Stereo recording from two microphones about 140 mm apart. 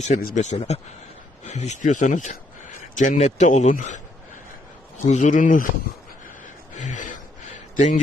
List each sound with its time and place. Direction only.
0.0 s speech: 75° left (ahead or behind)
5.0 s speech: 60° left (ahead or behind)
6.7 s a sound: 60° left (ahead or behind)